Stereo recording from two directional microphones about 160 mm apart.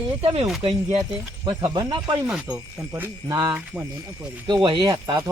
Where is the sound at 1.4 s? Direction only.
25° right (ahead or behind).